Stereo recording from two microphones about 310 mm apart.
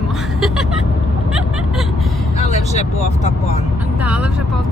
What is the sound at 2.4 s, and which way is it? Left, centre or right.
Vehicle, left.